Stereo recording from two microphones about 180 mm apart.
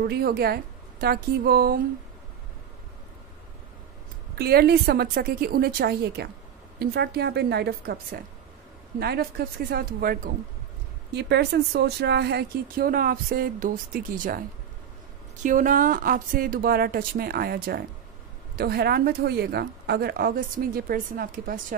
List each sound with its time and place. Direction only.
0.0 s speech: 60° right (ahead or behind)
4.4 s speech: 60° right (ahead or behind)
11.1 s speech: 70° right (ahead or behind); by 14.4 s 50° right (ahead or behind)
15.4 s speech: 50° right (ahead or behind)